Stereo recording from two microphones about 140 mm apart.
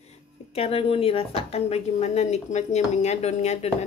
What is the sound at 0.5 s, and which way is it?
A woman's voice, 45° left (ahead or behind).